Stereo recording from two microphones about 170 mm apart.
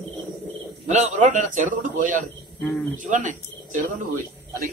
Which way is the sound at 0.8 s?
45° right (ahead or behind).